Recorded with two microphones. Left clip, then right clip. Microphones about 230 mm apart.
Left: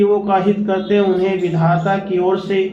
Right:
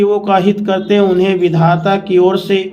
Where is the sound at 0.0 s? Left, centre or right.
Right.